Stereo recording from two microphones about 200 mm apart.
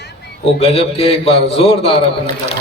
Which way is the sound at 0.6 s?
30° left (ahead or behind).